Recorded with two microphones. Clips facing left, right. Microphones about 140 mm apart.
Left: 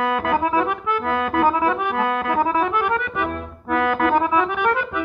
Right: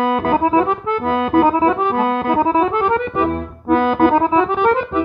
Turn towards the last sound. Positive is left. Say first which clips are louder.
# right 5 dB
turn(degrees=-25)  # may be behind; listen again after turning